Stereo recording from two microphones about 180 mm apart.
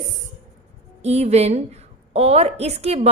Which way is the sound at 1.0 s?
35° right (ahead or behind).